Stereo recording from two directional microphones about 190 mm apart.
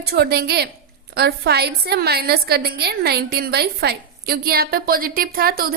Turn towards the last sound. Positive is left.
turn(degrees=-50)  # may be behind; listen again after turning